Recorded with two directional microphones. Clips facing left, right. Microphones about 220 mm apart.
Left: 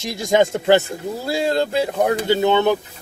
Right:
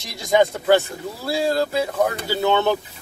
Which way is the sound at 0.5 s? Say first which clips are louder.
Left 2 dB; 20° left (ahead or behind).